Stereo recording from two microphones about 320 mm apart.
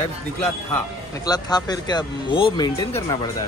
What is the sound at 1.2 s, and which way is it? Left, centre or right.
Speech, centre.